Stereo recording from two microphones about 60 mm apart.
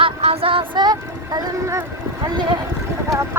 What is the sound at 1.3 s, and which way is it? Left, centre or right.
Speech, right.